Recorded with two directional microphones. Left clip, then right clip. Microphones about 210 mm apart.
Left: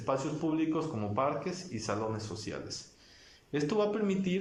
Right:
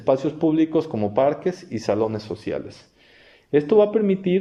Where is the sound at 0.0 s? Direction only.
40° right (ahead or behind).